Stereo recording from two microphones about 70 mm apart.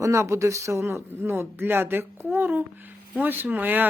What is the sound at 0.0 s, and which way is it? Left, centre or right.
A woman's voice, right.